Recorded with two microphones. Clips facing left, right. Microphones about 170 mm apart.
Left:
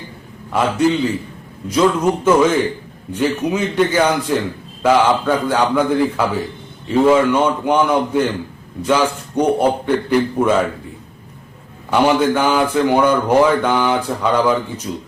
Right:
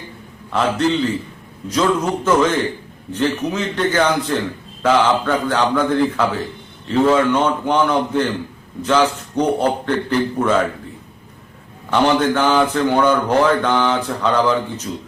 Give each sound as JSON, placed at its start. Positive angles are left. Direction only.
{"t": 0.5, "sound": "a man's voice", "side_deg": 10}
{"t": 11.9, "sound": "a man's voice", "side_deg": 10}